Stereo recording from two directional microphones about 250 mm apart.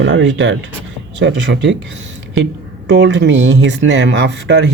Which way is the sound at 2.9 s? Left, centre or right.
Right.